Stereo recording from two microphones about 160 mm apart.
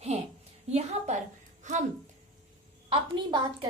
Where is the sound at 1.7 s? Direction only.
50° right (ahead or behind).